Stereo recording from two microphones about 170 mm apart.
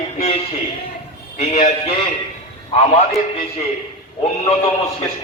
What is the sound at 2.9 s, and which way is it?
A man's voice, 40° left (ahead or behind).